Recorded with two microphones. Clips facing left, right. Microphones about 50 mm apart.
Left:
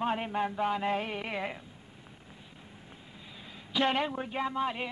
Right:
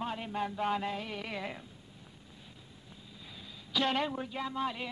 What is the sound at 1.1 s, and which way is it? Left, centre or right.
Speech, left.